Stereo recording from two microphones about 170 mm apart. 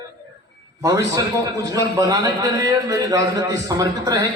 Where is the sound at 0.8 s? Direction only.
20° right (ahead or behind).